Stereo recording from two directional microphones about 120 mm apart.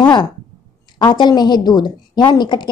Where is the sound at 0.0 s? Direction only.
40° left (ahead or behind).